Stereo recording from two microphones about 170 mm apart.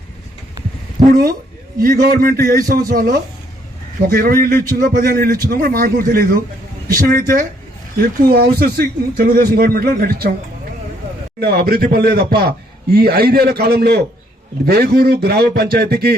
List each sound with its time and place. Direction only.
0.9 s speech: 60° right (ahead or behind)
11.3 s a man's voice: 65° right (ahead or behind)